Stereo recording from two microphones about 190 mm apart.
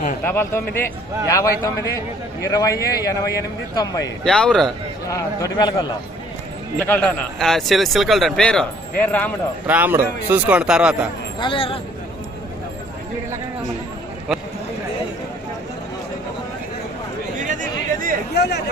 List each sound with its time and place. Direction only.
0.3 s a man's voice: 10° left (ahead or behind)
4.2 s a man's voice: 5° left (ahead or behind)
5.0 s a man's voice: 15° left (ahead or behind)
6.7 s a man's voice: 10° left (ahead or behind)
9.6 s speech: 10° right (ahead or behind)
11.3 s speech: 25° left (ahead or behind)
17.4 s chatter: 45° right (ahead or behind)
18.3 s a sound: 60° left (ahead or behind)